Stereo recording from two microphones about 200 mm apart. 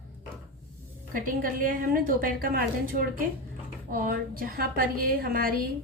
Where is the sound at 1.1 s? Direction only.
45° right (ahead or behind).